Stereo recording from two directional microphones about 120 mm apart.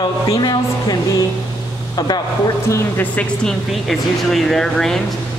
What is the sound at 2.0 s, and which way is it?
Speech, 35° left (ahead or behind).